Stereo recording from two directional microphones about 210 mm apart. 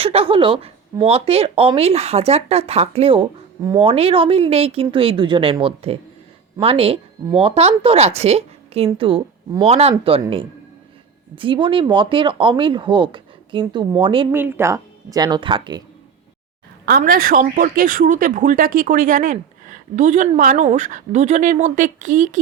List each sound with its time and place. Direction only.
0.0 s a woman's voice: 25° right (ahead or behind)
14.3 s a woman's voice: 10° right (ahead or behind)
16.8 s a woman's voice: 45° right (ahead or behind)